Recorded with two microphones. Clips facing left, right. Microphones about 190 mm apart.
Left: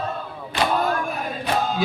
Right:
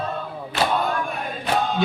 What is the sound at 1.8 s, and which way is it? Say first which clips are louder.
Music: right 2 dB; centre (ahead or behind).